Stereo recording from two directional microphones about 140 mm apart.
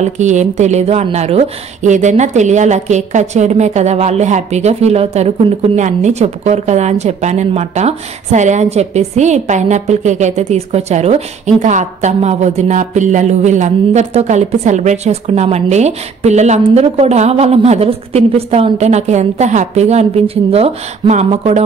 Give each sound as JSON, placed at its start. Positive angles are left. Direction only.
{"t": 0.0, "sound": "a woman's voice", "side_deg": -55}